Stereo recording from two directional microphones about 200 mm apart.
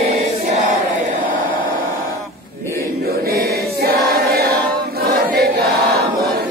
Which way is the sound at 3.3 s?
50° right (ahead or behind).